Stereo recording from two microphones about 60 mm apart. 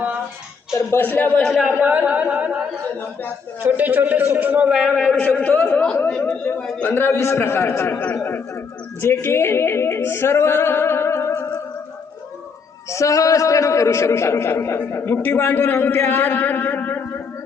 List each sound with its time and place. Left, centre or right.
0.7 s a sound: left
1.0 s a man's voice: left
1.4 s a man's voice: centre
1.7 s a man's voice: right
3.6 s a man's voice: right
4.7 s a man's voice: centre
5.1 s a man's voice: left
6.1 s speech: centre
6.9 s a sound: left
8.1 s a man's voice: left
9.2 s a sound: left
11.3 s music: left
12.9 s a man's voice: left